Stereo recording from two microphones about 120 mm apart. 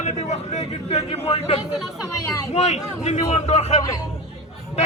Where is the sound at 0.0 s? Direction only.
70° left (ahead or behind).